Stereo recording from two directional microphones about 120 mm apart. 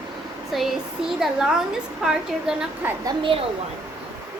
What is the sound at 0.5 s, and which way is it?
A woman's voice, centre (ahead or behind).